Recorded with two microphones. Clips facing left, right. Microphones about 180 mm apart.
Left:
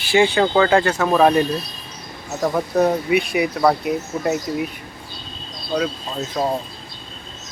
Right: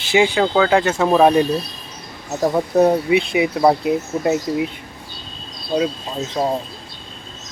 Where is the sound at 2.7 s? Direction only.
25° right (ahead or behind).